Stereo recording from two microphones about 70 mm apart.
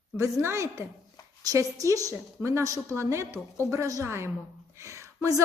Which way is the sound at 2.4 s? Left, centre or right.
Right.